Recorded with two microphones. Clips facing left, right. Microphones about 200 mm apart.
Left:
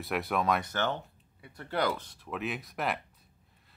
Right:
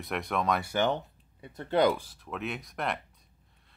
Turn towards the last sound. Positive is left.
turn(degrees=0)  # may be behind; listen again after turning